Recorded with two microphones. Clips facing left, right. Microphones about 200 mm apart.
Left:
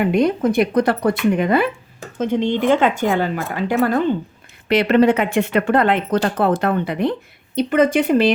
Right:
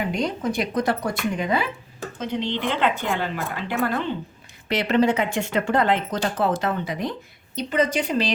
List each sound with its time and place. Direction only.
0.0 s speech: 55° left (ahead or behind)
4.7 s speech: 60° left (ahead or behind)